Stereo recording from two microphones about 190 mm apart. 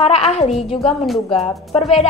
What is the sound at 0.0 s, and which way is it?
Speech, 35° left (ahead or behind).